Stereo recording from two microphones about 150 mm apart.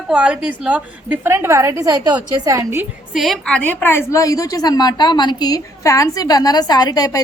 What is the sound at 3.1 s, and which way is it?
A woman's voice, centre (ahead or behind).